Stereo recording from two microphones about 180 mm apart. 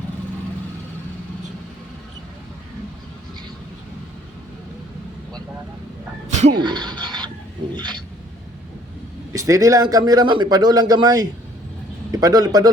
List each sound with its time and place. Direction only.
6.5 s speech: 25° right (ahead or behind)
9.3 s speech: 20° right (ahead or behind)